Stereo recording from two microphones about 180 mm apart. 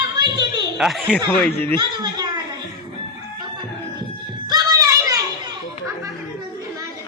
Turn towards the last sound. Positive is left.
turn(degrees=-20)  # may be behind; listen again after turning